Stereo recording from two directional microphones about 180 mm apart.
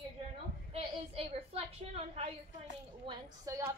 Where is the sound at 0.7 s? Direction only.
35° right (ahead or behind).